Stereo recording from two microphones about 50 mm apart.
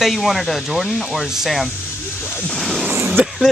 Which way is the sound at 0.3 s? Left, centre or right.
Centre.